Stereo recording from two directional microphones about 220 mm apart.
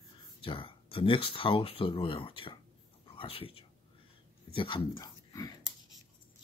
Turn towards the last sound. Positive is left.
turn(degrees=15)  # may be behind; listen again after turning